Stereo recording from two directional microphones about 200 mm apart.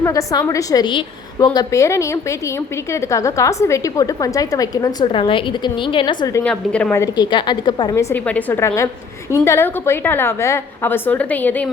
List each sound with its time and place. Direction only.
0.0 s a woman's voice: 15° left (ahead or behind)
6.4 s a woman's voice: 5° left (ahead or behind)
6.9 s a woman's voice: 20° left (ahead or behind)
8.1 s a woman's voice: 10° left (ahead or behind)